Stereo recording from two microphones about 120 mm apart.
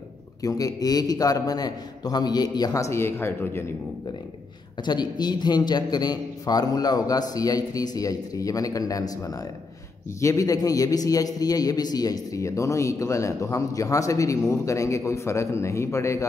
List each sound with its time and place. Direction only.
0.4 s a man's voice: 30° left (ahead or behind)
4.8 s a man's voice: 35° left (ahead or behind)